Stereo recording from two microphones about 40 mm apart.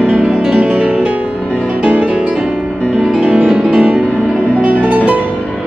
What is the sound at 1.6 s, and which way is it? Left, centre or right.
Music, right.